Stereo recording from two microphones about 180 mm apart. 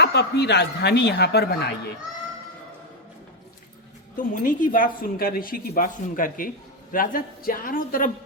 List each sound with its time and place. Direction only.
0.0 s speech: 70° left (ahead or behind)
4.4 s speech: 50° left (ahead or behind)